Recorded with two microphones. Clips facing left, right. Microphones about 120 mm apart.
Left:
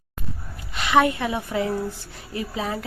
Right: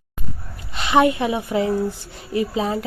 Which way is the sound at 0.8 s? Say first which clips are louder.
Right 3 dB; 25° right (ahead or behind).